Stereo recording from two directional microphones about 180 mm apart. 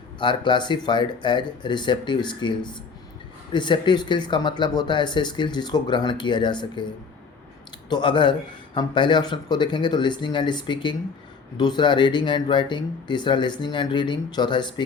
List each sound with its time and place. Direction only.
0.2 s speech: 25° left (ahead or behind)